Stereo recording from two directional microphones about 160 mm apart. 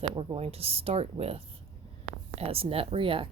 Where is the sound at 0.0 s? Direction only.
40° right (ahead or behind).